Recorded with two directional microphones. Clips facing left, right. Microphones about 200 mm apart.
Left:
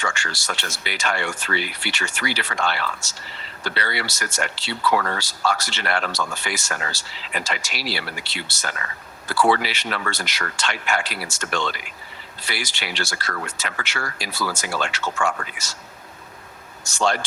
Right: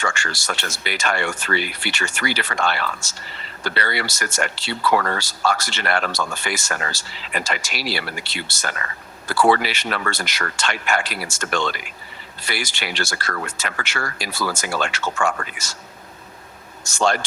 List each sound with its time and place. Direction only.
0.0 s speech: 50° right (ahead or behind)
16.9 s speech: 50° right (ahead or behind)